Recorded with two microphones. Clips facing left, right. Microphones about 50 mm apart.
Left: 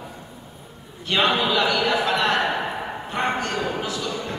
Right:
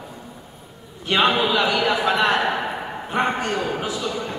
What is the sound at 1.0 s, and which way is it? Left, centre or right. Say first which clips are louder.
A man's voice: right 2 dB; centre.